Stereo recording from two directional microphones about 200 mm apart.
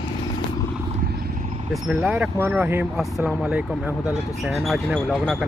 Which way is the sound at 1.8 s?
5° right (ahead or behind).